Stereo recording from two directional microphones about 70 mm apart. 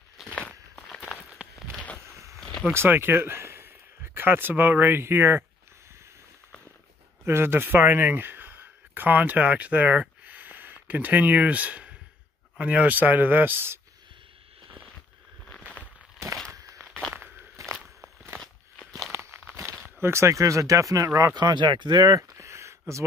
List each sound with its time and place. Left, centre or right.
0.2 s walk: centre
1.4 s a sound: centre
2.0 s a sound: right
2.7 s speech: right
7.2 s speech: right
16.7 s walk: centre
17.1 s walk: right
17.7 s walk: centre
19.6 s speech: right
21.4 s speech: right
22.5 s a sound: right